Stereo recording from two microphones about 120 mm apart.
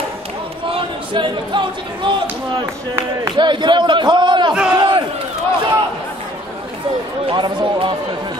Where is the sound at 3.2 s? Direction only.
40° right (ahead or behind).